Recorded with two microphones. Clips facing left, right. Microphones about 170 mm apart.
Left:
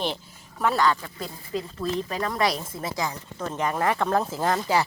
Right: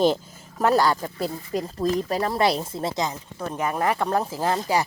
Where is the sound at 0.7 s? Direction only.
40° right (ahead or behind); by 3.2 s 20° right (ahead or behind).